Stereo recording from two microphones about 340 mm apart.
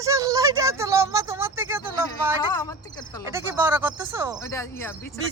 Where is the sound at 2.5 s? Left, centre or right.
Centre.